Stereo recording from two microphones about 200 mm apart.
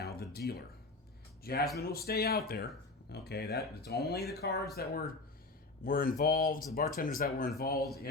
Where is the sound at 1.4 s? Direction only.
50° left (ahead or behind).